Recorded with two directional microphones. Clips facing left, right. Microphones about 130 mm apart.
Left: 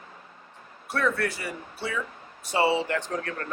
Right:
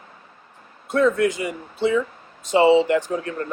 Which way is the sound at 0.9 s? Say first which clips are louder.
Right 8 dB; 20° right (ahead or behind).